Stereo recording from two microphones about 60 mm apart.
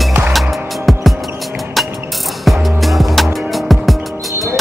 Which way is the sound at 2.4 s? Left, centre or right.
Centre.